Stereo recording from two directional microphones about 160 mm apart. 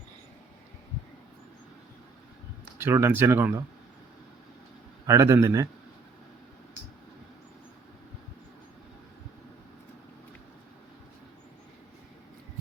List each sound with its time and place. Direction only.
2.7 s speech: 15° right (ahead or behind)
5.0 s speech: 20° right (ahead or behind)